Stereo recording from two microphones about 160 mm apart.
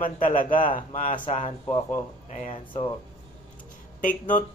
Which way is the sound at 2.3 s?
45° left (ahead or behind).